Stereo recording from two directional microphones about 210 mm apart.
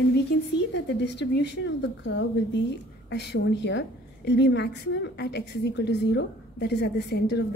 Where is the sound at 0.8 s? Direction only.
55° left (ahead or behind).